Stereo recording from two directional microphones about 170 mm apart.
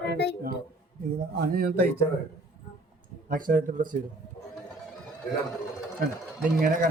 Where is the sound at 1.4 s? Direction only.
65° right (ahead or behind).